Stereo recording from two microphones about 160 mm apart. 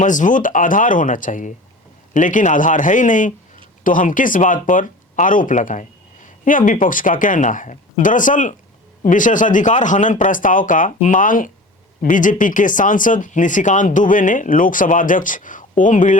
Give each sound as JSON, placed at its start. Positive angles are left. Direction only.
{"t": 0.0, "sound": "a man's voice", "side_deg": 55}